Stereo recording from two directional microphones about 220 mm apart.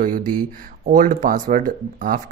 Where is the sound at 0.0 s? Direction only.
35° right (ahead or behind).